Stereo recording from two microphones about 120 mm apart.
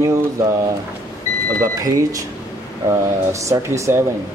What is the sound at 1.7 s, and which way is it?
Speech, 30° right (ahead or behind).